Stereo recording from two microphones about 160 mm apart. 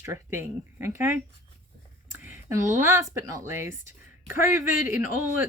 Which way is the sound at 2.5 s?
15° right (ahead or behind).